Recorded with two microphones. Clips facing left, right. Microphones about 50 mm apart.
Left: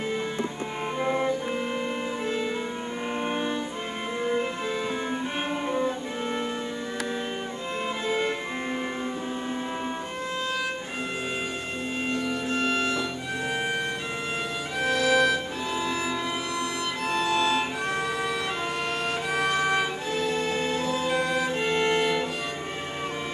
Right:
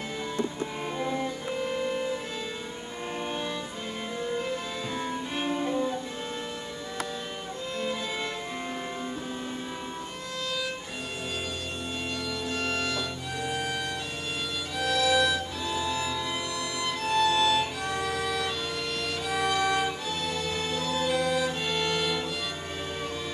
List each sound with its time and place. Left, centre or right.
0.9 s music: left
3.3 s music: left
5.4 s cello: left
7.8 s music: left
12.1 s music: left
14.8 s violin: left
17.0 s music: left